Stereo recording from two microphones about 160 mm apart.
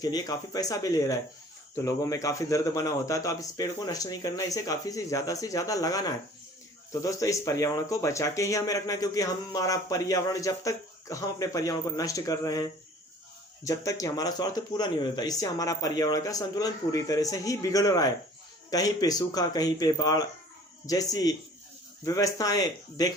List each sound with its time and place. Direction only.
0.0 s speech: 25° left (ahead or behind)
13.7 s speech: 20° left (ahead or behind)